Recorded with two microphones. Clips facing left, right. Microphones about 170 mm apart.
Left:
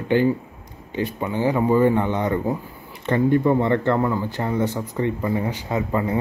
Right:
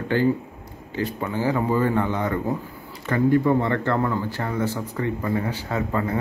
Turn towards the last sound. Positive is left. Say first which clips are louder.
# left 2 dB
turn(degrees=20)  # may be behind; listen again after turning